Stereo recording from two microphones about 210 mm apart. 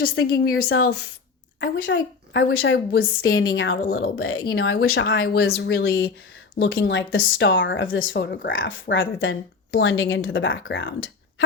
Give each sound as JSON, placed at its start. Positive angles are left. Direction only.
{"t": 0.0, "sound": "a woman's voice", "side_deg": 45}
{"t": 0.7, "sound": "speech", "side_deg": 90}
{"t": 1.6, "sound": "a woman's voice", "side_deg": 60}
{"t": 3.2, "sound": "a woman's voice", "side_deg": 70}
{"t": 3.8, "sound": "a woman's voice", "side_deg": 45}
{"t": 4.1, "sound": "speech", "side_deg": 80}
{"t": 4.6, "sound": "a woman's voice", "side_deg": 50}
{"t": 6.6, "sound": "speech", "side_deg": 60}
{"t": 8.1, "sound": "speech", "side_deg": 50}